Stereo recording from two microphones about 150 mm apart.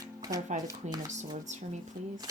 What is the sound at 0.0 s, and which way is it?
Shuffling cards, 25° right (ahead or behind).